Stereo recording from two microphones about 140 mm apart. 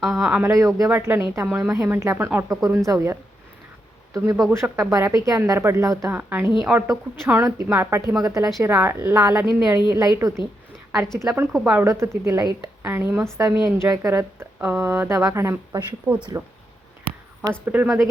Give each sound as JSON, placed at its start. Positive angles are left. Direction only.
{"t": 0.0, "sound": "speech", "side_deg": -5}
{"t": 0.5, "sound": "a woman's voice", "side_deg": -25}
{"t": 6.7, "sound": "speech", "side_deg": -5}
{"t": 7.3, "sound": "a woman's voice", "side_deg": -20}
{"t": 11.6, "sound": "a woman's voice", "side_deg": -10}
{"t": 17.7, "sound": "a woman's voice", "side_deg": -10}